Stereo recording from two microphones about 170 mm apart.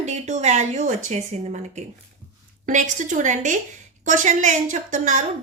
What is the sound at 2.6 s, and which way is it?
A woman's voice, 50° right (ahead or behind).